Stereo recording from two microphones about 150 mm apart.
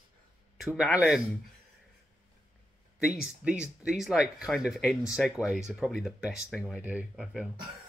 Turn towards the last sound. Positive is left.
turn(degrees=-5)  # may be behind; listen again after turning